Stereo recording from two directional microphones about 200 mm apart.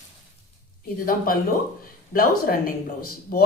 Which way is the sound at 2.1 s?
45° left (ahead or behind).